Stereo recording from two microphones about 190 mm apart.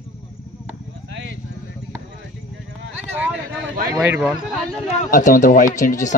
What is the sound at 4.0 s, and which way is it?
Speech, 10° right (ahead or behind).